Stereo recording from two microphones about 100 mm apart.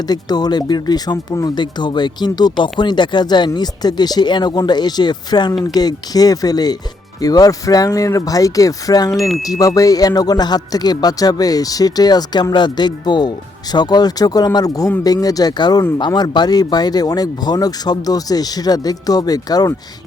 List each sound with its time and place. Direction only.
0.1 s speech: 45° left (ahead or behind)